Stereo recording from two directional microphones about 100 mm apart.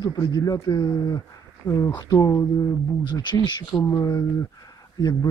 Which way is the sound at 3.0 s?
50° left (ahead or behind).